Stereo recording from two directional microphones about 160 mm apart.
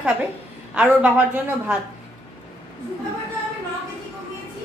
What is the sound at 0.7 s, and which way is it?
A woman's voice, 10° right (ahead or behind).